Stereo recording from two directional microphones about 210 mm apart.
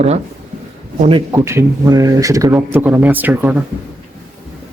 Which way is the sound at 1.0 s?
25° right (ahead or behind).